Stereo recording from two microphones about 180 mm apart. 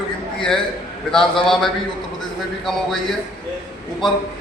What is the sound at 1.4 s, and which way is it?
A man's voice, centre (ahead or behind).